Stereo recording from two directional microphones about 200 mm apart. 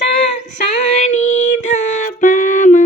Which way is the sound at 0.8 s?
35° left (ahead or behind).